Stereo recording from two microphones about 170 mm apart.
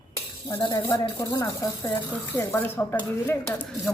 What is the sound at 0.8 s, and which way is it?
Speech, 20° left (ahead or behind).